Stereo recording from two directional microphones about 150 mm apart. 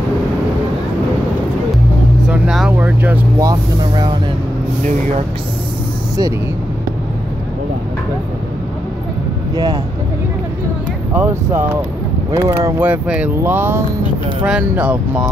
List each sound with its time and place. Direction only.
2.2 s vehicle: 5° right (ahead or behind); by 4.1 s 25° right (ahead or behind)
11.1 s speech: 15° right (ahead or behind)
12.8 s speech: 10° right (ahead or behind)